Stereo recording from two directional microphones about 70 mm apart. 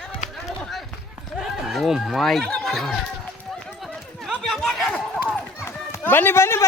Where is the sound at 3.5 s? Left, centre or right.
Centre.